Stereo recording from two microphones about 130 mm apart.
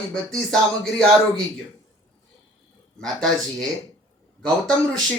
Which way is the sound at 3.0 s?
5° left (ahead or behind).